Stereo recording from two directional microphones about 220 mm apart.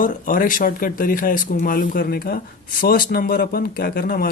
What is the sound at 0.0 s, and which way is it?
Speech, 40° left (ahead or behind).